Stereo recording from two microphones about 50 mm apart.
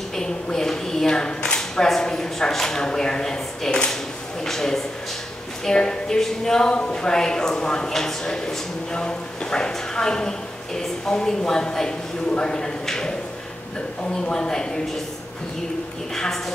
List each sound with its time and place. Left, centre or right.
0.1 s a sound: centre
5.7 s a woman's voice: centre
14.2 s a woman's voice: centre
16.2 s a woman's voice: centre